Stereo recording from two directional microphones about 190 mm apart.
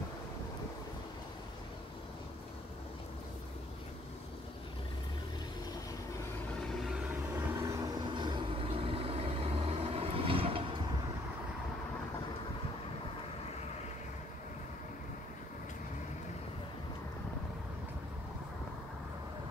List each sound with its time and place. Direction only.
6.6 s vehicle: centre (ahead or behind)
7.3 s vehicle: 15° right (ahead or behind)